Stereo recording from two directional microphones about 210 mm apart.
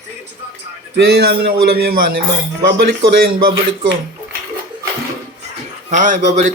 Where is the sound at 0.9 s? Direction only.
50° right (ahead or behind).